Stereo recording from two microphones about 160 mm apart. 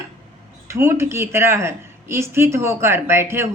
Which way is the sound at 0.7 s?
15° right (ahead or behind).